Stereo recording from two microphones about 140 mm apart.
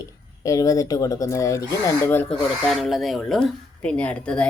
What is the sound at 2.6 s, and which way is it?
Speech, centre (ahead or behind).